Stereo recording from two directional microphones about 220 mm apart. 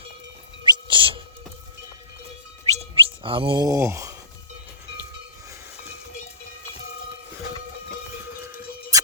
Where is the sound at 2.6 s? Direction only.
25° right (ahead or behind).